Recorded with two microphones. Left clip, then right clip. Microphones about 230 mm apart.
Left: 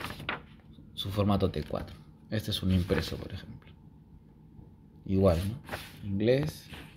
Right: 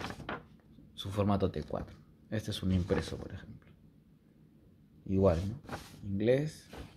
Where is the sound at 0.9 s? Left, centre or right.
Centre.